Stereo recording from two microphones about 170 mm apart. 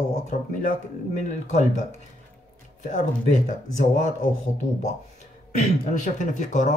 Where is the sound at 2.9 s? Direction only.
45° left (ahead or behind).